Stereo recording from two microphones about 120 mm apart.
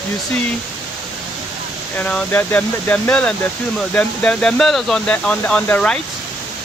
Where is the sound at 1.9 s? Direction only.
10° left (ahead or behind).